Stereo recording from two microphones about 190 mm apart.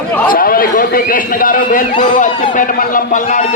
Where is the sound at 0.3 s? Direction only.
50° left (ahead or behind).